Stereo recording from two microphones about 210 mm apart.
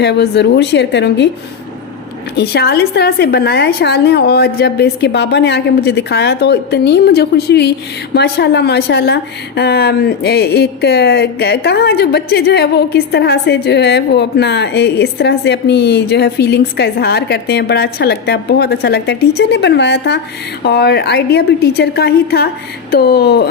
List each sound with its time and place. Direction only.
0.0 s a woman's voice: 55° left (ahead or behind)
2.3 s a woman's voice: 50° left (ahead or behind)